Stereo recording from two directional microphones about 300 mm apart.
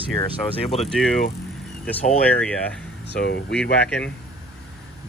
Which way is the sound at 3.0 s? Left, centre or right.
Left.